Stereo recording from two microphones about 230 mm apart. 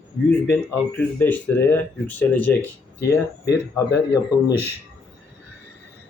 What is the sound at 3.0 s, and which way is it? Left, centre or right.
Speech, left.